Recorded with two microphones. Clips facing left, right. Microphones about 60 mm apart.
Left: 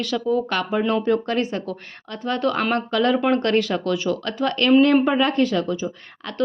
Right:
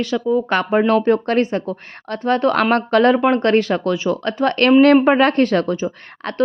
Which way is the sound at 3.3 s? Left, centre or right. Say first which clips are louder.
Right 4 dB; right.